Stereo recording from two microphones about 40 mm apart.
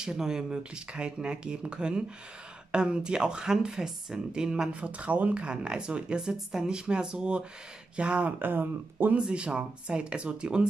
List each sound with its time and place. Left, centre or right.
0.0 s speech: centre
4.7 s speech: right
8.4 s speech: right
9.1 s speech: right